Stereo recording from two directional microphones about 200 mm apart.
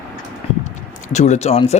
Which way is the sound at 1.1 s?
35° left (ahead or behind).